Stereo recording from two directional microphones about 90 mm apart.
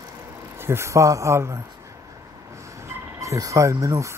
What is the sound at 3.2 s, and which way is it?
Speech, 40° right (ahead or behind).